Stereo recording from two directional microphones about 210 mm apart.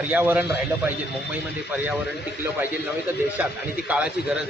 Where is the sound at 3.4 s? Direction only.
5° right (ahead or behind).